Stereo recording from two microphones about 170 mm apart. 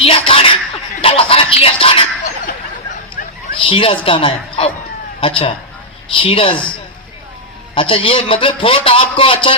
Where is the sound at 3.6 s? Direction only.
30° left (ahead or behind).